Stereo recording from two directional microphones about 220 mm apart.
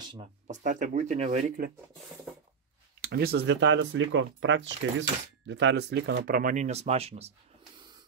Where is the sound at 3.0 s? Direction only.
45° right (ahead or behind); by 7.3 s 30° right (ahead or behind).